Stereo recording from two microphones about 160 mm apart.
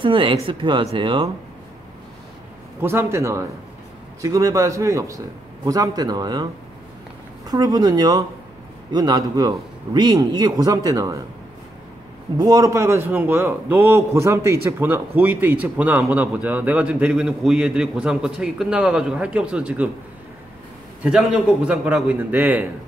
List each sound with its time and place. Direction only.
0.0 s speech: 30° right (ahead or behind)
2.8 s a man's voice: 15° right (ahead or behind)
12.4 s a man's voice: 20° right (ahead or behind)
21.0 s a man's voice: 5° right (ahead or behind)